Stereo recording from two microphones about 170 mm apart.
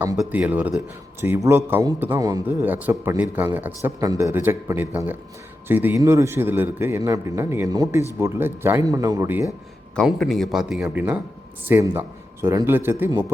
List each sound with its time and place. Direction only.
0.0 s a man's voice: 15° right (ahead or behind)
9.9 s a man's voice: 5° left (ahead or behind); by 13.2 s 15° right (ahead or behind)